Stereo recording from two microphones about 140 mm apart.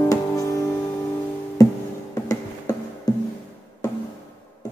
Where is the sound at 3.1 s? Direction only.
25° left (ahead or behind).